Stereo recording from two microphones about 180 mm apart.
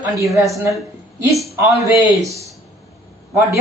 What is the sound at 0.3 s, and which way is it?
A woman's voice, 15° right (ahead or behind).